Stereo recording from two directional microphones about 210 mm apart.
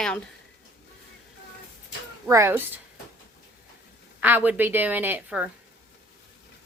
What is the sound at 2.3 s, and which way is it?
Speech, 10° right (ahead or behind).